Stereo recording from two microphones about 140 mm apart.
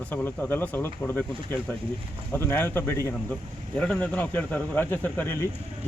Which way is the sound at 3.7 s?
5° left (ahead or behind).